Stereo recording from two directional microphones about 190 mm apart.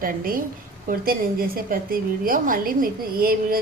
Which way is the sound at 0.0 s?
50° right (ahead or behind).